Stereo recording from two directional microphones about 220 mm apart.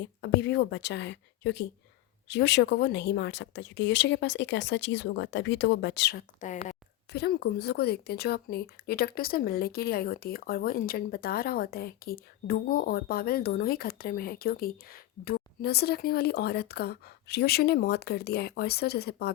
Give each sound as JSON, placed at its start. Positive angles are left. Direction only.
{"t": 0.0, "sound": "a woman's voice", "side_deg": 50}
{"t": 6.4, "sound": "a woman's voice", "side_deg": 35}
{"t": 7.1, "sound": "speech", "side_deg": 45}